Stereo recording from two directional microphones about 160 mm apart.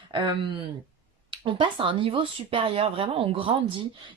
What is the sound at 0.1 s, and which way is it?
Speech, 30° right (ahead or behind).